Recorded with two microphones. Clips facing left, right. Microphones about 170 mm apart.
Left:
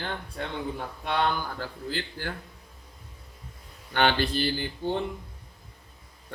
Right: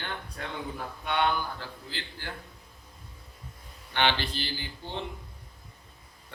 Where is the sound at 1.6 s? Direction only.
45° left (ahead or behind).